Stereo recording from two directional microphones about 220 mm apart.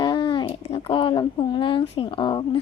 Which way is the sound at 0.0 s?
20° left (ahead or behind).